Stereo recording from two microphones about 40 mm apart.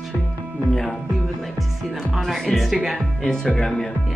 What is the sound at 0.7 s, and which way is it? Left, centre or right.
Speech, centre.